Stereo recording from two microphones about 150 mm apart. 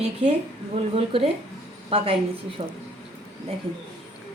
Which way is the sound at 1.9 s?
45° right (ahead or behind).